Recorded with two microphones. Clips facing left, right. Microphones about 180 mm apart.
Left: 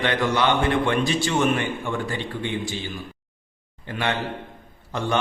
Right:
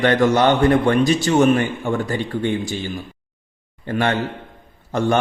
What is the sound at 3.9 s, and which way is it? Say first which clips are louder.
Speech: right 6 dB; 45° right (ahead or behind).